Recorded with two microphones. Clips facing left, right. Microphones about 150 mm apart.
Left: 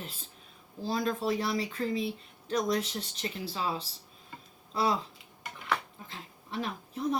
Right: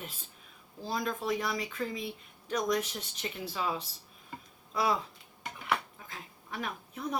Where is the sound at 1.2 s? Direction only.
30° left (ahead or behind).